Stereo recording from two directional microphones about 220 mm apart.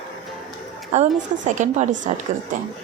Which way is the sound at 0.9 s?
30° right (ahead or behind).